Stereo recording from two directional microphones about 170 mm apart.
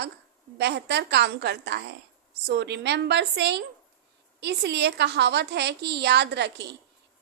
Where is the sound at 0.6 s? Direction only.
80° right.